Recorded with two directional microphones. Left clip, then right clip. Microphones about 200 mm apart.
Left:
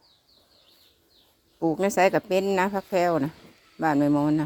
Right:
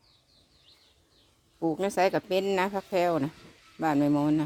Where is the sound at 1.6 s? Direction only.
15° left (ahead or behind).